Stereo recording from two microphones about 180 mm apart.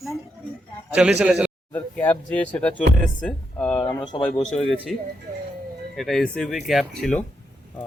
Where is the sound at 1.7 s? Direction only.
10° left (ahead or behind).